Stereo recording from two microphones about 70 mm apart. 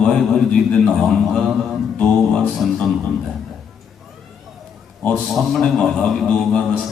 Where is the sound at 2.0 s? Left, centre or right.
Left.